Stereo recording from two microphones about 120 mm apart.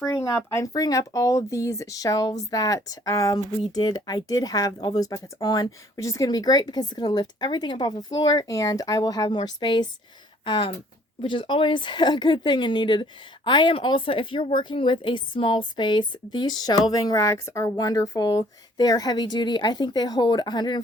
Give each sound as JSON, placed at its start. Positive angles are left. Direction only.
{"t": 0.0, "sound": "a woman's voice", "side_deg": 20}